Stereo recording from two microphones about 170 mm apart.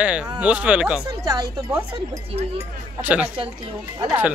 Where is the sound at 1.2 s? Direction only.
20° right (ahead or behind).